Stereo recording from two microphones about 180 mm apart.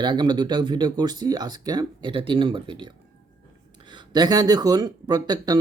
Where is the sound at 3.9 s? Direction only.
25° right (ahead or behind).